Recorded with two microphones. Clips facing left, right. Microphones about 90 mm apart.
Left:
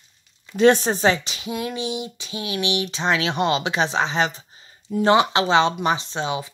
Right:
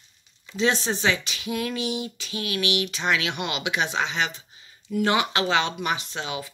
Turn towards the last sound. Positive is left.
turn(degrees=25)  # may be behind; listen again after turning